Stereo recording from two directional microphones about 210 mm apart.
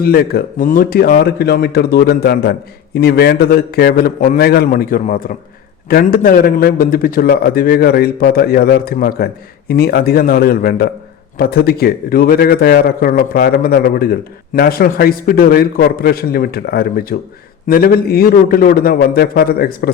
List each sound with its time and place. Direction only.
0.0 s a man's voice: 45° left (ahead or behind)